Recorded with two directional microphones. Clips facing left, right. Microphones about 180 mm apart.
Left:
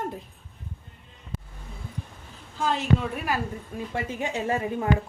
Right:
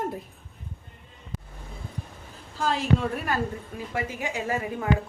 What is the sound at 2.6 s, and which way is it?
Speech, centre (ahead or behind).